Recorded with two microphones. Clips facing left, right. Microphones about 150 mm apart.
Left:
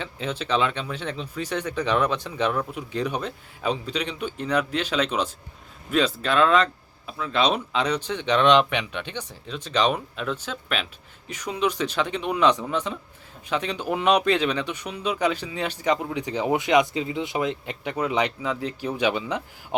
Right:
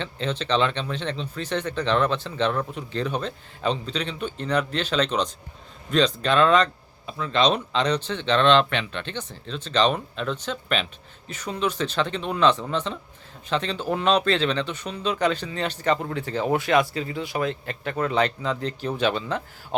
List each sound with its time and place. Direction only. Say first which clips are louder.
0.0 s speech: right 2 dB; 10° left (ahead or behind)